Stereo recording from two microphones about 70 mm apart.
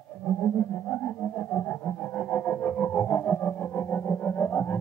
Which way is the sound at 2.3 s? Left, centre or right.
Left.